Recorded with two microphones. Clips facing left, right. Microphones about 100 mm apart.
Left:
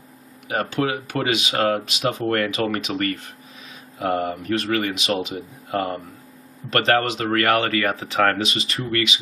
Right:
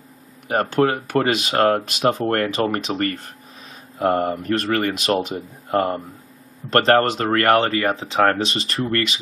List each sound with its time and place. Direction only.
0.5 s speech: 45° right (ahead or behind)